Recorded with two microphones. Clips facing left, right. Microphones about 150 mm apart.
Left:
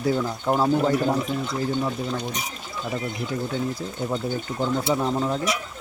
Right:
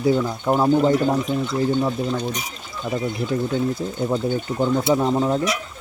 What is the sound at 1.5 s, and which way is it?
Speech, 20° right (ahead or behind).